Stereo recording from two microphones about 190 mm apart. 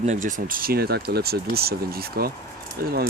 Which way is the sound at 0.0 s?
40° right (ahead or behind).